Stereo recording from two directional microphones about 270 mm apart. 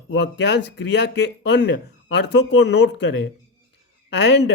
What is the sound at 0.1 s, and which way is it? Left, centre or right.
Speech, left.